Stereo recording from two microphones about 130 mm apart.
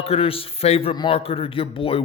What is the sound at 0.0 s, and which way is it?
A man's voice, 50° left (ahead or behind).